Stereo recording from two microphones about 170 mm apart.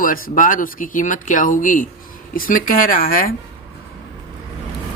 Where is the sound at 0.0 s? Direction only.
55° left (ahead or behind).